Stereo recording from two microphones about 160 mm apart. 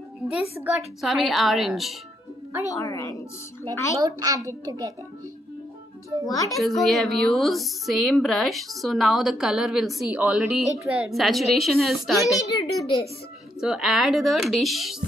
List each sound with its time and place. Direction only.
0.3 s speech: 5° right (ahead or behind)
2.7 s a child's voice: 20° left (ahead or behind)
4.0 s a child's voice: 20° right (ahead or behind)
6.2 s a child's voice: 20° left (ahead or behind)
6.5 s speech: centre (ahead or behind)
12.4 s a child's voice: 25° left (ahead or behind)
13.6 s speech: 5° right (ahead or behind)